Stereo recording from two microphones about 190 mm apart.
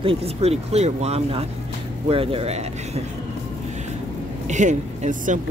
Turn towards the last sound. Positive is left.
turn(degrees=-40)  # may be behind; listen again after turning